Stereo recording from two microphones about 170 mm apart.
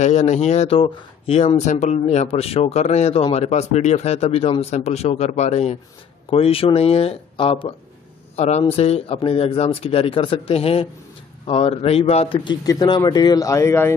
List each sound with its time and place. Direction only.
0.0 s speech: 45° left (ahead or behind)
12.4 s speech: 25° left (ahead or behind)